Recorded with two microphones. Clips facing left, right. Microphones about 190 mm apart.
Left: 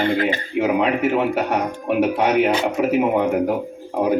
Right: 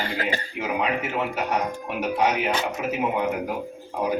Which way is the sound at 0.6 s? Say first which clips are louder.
Left 8 dB; 60° left (ahead or behind).